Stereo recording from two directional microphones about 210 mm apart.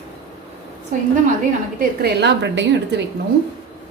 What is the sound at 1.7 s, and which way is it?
A woman's voice, 50° right (ahead or behind).